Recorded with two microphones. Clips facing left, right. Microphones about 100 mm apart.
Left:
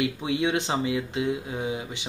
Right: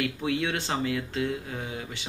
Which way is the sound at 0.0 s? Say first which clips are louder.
Left 3 dB; 20° left (ahead or behind).